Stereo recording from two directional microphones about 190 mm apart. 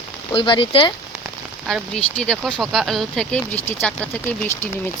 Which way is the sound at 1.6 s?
Centre (ahead or behind).